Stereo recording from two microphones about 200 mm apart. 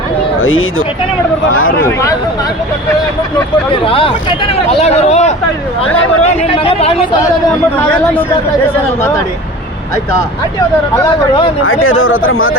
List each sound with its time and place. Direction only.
0.4 s speech: 90° left
1.8 s speech: 15° left (ahead or behind)
3.7 s speech: 25° left (ahead or behind)
8.6 s speech: 10° left (ahead or behind)
11.6 s speech: 90° left